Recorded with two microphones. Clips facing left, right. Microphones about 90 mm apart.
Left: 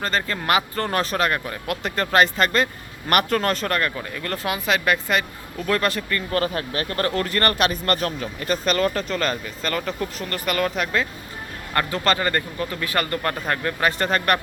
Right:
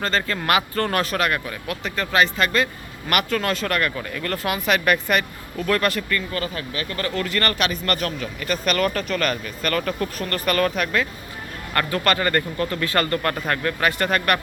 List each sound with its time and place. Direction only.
0.0 s speech: 15° left (ahead or behind)
6.3 s speech: 50° left (ahead or behind); by 14.4 s 25° left (ahead or behind)